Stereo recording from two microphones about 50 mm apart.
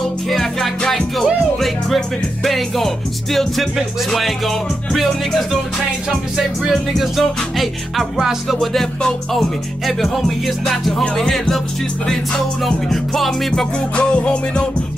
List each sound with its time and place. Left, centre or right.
0.3 s music: centre
7.0 s music: centre
8.5 s music: centre
12.6 s music: centre
13.9 s music: left